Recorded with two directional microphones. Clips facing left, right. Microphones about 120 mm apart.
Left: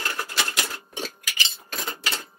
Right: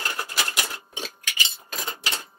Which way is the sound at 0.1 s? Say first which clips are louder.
Left 1 dB; 15° right (ahead or behind).